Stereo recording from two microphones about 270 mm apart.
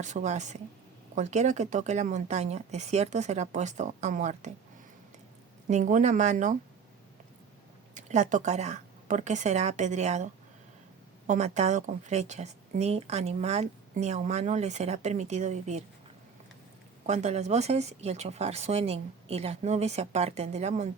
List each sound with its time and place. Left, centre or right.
0.0 s speech: right
5.6 s speech: right
7.9 s speech: right
11.3 s speech: right
17.1 s speech: right